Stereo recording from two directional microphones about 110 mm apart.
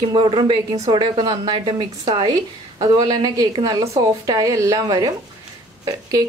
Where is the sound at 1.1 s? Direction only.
40° right (ahead or behind).